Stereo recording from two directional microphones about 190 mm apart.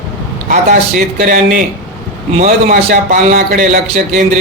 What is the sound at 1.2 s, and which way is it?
Speech, 45° right (ahead or behind).